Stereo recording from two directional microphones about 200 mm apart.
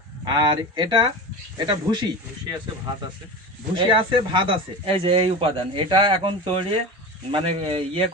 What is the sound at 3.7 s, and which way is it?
Speech, 25° right (ahead or behind).